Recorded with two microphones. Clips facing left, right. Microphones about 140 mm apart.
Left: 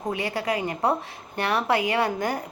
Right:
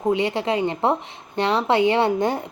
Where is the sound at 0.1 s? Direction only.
25° right (ahead or behind).